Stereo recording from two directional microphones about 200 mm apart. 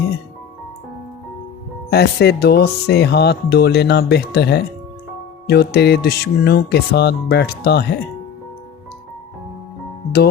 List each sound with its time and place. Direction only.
1.9 s speech: 55° left (ahead or behind)